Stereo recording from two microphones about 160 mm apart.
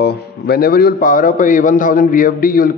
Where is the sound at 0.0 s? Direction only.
80° left.